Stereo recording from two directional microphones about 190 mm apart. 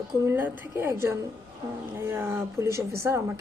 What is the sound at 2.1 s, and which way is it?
A woman's voice, 10° right (ahead or behind).